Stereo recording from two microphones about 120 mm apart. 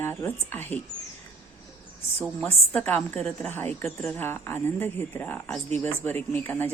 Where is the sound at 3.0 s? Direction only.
5° left (ahead or behind).